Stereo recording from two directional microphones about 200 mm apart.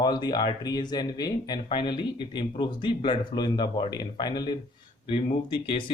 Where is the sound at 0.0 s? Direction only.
20° left (ahead or behind).